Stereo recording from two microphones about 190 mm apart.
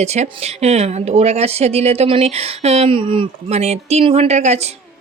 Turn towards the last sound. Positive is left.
turn(degrees=-35)  # may be behind; listen again after turning